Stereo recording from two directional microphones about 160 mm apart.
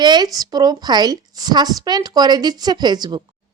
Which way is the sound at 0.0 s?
25° right (ahead or behind).